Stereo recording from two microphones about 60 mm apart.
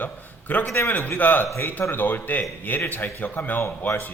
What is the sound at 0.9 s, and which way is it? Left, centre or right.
A man's voice, left.